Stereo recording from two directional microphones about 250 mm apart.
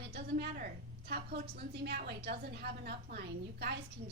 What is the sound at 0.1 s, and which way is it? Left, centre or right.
A woman's voice, right.